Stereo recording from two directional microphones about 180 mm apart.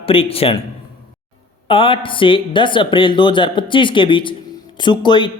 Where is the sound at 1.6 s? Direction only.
30° left (ahead or behind).